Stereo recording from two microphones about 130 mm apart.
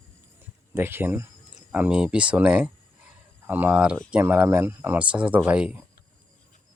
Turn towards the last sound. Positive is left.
turn(degrees=-10)  # may be behind; listen again after turning